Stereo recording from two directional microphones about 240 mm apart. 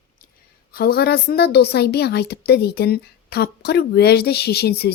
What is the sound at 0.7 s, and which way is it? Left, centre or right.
Speech, left.